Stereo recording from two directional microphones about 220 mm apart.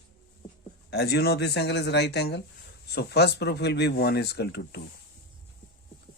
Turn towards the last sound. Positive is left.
turn(degrees=50)  # may be behind; listen again after turning